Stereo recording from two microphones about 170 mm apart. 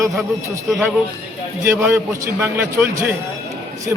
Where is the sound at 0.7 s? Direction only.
Centre (ahead or behind).